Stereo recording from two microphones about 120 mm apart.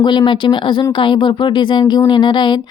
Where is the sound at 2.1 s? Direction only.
40° left (ahead or behind).